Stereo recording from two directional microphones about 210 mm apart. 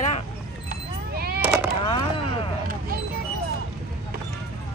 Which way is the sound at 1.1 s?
50° right (ahead or behind).